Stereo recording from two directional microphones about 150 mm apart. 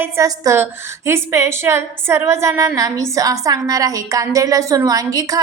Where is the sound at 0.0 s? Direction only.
20° right (ahead or behind).